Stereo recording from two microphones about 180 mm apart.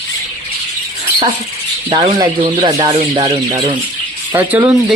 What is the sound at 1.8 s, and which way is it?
Speech, 35° right (ahead or behind).